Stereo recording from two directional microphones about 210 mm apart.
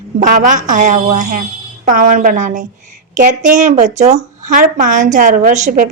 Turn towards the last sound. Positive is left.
turn(degrees=-40)  # may be behind; listen again after turning